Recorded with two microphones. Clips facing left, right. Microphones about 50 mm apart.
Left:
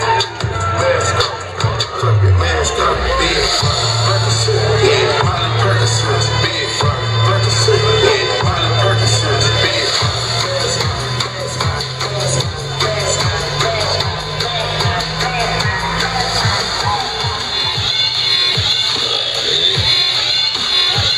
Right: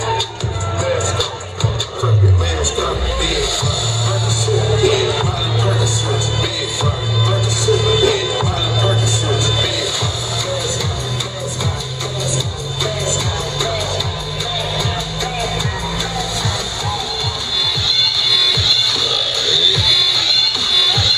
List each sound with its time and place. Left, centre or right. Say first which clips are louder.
2.5 s music: left 5 dB; left